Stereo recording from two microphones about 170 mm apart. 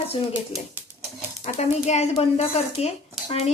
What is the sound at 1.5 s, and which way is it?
Speech, 40° left (ahead or behind).